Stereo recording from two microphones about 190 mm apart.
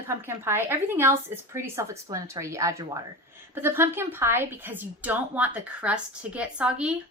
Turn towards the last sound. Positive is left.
turn(degrees=-5)  # may be behind; listen again after turning